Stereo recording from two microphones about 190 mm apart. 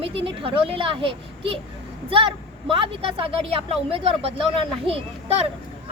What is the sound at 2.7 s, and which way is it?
A woman's voice, 30° right (ahead or behind).